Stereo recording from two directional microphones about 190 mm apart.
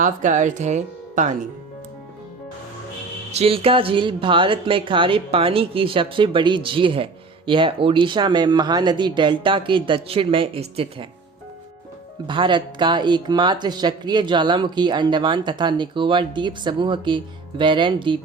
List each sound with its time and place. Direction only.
0.0 s speech: 40° right (ahead or behind)
3.3 s speech: 30° right (ahead or behind)
12.3 s speech: 25° right (ahead or behind)